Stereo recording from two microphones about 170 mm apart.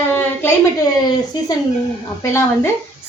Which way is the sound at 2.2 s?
15° left (ahead or behind).